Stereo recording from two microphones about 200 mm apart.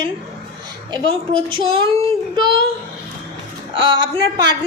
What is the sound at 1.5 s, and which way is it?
A woman's voice, 25° right (ahead or behind).